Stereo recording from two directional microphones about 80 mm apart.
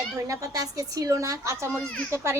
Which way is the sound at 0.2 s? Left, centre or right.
Right.